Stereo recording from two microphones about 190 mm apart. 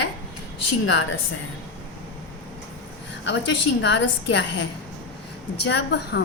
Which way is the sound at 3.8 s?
70° left (ahead or behind).